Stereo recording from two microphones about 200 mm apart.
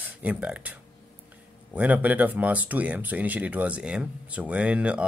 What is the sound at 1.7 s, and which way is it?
Speech, 10° right (ahead or behind).